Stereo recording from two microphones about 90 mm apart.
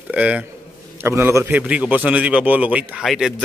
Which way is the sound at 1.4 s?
15° right (ahead or behind).